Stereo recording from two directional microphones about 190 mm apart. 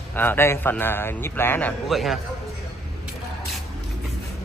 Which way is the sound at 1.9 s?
Centre (ahead or behind).